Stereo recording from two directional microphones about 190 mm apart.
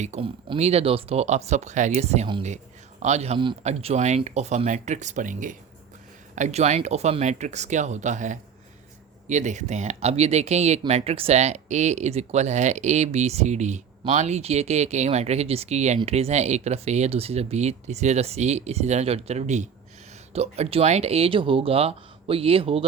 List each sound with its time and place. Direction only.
0.0 s speech: 35° right (ahead or behind)